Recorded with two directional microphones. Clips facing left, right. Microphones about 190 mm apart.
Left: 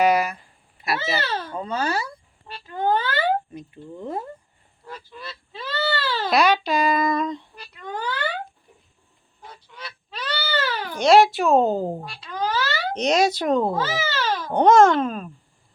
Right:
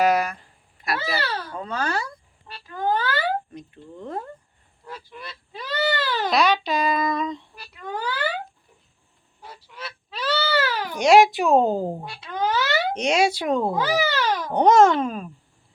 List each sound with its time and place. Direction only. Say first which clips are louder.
0.0 s a sound: left 1 dB; centre (ahead or behind)
0.9 s a child's voice: left 1 dB; 20° left (ahead or behind)
1.5 s speech: left 2 dB; 5° left (ahead or behind)
2.5 s speech: left 2 dB; 25° left (ahead or behind)
3.5 s speech: left 3 dB; 5° left (ahead or behind)
5.1 s a child's voice: even; 15° right (ahead or behind)
6.3 s speech: left 2 dB; centre (ahead or behind)
9.6 s a child's voice: right 4 dB; 5° right (ahead or behind)